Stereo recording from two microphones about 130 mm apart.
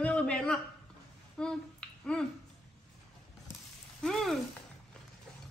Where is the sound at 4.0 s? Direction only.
5° left (ahead or behind).